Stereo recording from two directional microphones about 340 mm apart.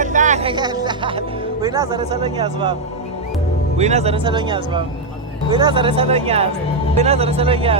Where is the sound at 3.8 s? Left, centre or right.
Centre.